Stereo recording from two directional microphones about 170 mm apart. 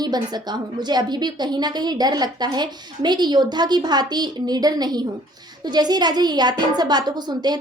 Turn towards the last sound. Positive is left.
turn(degrees=-25)  # may be behind; listen again after turning